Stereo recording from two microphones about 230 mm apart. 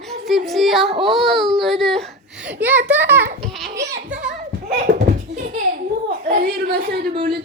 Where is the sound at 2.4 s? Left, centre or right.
Centre.